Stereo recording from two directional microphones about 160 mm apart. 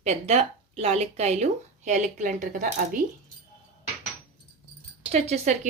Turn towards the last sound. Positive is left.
turn(degrees=-45)  # may be behind; listen again after turning